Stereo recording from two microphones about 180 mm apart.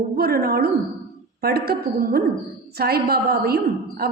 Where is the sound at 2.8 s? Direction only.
60° right (ahead or behind).